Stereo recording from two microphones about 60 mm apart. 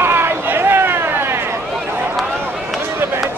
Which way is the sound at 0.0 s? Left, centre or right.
Right.